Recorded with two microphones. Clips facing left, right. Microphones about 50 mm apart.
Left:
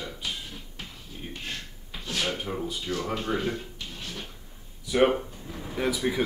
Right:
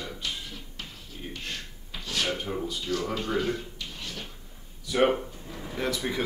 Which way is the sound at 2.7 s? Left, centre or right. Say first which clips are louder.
Even; centre.